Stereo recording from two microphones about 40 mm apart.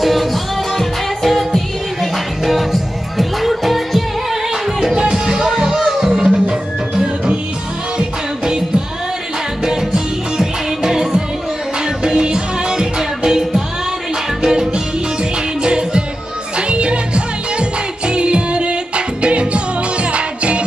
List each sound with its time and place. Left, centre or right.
0.0 s music: centre
5.1 s music: centre
8.0 s music: right